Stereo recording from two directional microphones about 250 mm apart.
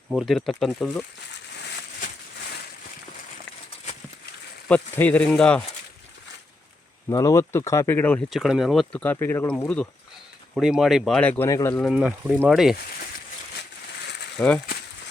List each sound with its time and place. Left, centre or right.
0.1 s speech: centre
1.5 s a sound: left
4.7 s speech: centre
7.1 s speech: centre
11.9 s speech: centre
14.3 s speech: centre